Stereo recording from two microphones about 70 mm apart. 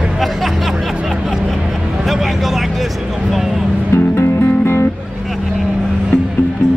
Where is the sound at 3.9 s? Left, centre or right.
Left.